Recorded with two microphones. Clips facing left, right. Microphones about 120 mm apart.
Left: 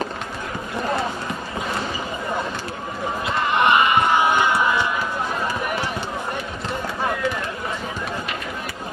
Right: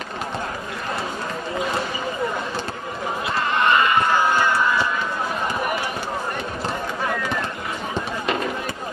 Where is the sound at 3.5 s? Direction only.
20° left (ahead or behind).